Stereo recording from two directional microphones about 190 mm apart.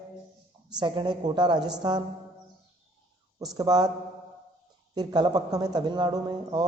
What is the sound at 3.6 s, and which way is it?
Speech, 20° right (ahead or behind).